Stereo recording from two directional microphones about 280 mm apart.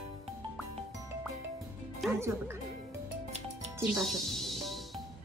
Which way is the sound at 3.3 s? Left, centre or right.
Right.